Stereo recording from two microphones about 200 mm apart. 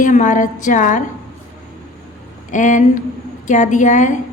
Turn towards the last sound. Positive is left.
turn(degrees=40)  # may be behind; listen again after turning